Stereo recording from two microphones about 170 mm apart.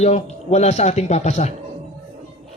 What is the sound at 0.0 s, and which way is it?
A man's voice, 40° left (ahead or behind).